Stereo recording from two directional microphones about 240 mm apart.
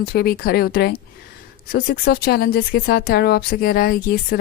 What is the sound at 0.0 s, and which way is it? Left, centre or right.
Speech, left.